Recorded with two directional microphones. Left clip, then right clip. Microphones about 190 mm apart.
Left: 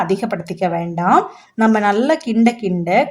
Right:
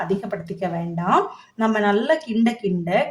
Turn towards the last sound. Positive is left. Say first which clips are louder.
# left 5 dB
turn(degrees=25)  # may be behind; listen again after turning